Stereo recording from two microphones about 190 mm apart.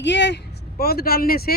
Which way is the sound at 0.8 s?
55° left (ahead or behind).